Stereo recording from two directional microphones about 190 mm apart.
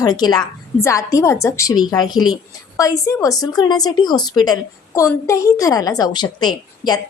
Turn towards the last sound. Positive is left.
turn(degrees=20)  # may be behind; listen again after turning